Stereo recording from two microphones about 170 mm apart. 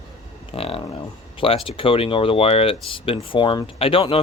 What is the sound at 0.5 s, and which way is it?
Speech, 35° left (ahead or behind).